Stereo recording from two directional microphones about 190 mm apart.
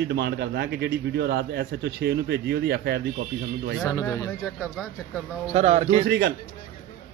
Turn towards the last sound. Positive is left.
turn(degrees=-60)  # may be behind; listen again after turning